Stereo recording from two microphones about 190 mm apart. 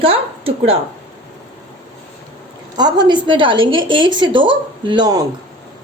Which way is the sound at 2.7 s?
25° right (ahead or behind).